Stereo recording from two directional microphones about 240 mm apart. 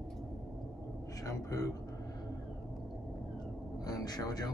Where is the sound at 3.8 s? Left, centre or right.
Centre.